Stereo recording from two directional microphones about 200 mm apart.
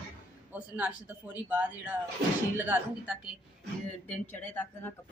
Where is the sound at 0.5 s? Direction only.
10° right (ahead or behind).